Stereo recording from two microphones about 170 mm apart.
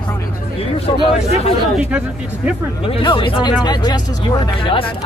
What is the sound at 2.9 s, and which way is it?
Speech, 30° left (ahead or behind).